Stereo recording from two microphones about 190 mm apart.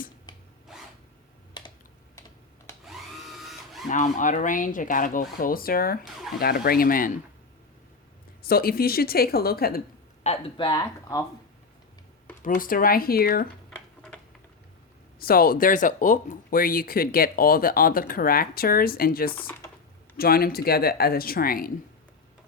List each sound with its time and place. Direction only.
0.3 s a sound: 20° left (ahead or behind)
2.8 s drill: centre (ahead or behind)
3.8 s speech: 40° left (ahead or behind)
6.1 s speech: centre (ahead or behind)
6.4 s speech: 55° left (ahead or behind)
8.4 s speech: 50° left (ahead or behind)
10.2 s speech: 25° left (ahead or behind)
12.4 s speech: 45° left (ahead or behind)
15.2 s speech: 50° left (ahead or behind)